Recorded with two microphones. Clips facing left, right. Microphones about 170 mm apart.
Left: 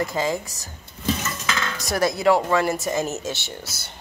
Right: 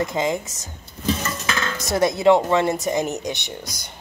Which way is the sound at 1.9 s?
20° right (ahead or behind).